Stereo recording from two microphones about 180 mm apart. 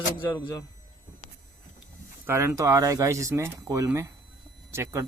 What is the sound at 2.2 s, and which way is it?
Speech, 15° right (ahead or behind).